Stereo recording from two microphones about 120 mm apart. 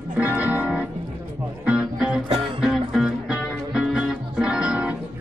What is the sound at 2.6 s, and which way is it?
Music, 5° right (ahead or behind).